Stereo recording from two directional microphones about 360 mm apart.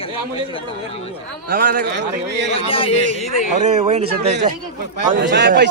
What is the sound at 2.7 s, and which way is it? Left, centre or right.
Speech, centre.